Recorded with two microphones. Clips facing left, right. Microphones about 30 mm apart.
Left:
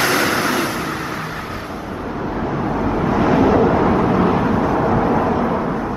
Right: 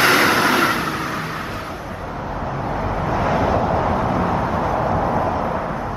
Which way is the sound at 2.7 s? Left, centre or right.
Centre.